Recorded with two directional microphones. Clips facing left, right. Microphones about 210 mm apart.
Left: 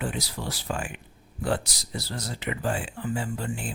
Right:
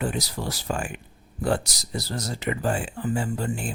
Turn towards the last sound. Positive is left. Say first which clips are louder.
# right 4 dB
turn(degrees=-45)  # may be behind; listen again after turning